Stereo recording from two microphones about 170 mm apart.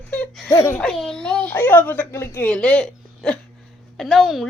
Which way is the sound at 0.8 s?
5° left (ahead or behind).